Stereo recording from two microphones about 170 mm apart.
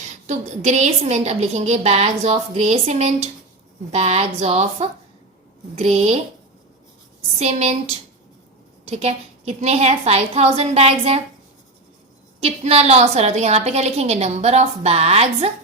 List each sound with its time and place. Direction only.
0.3 s a woman's voice: 45° right (ahead or behind)
7.3 s a woman's voice: 40° right (ahead or behind)
12.4 s a woman's voice: 35° right (ahead or behind)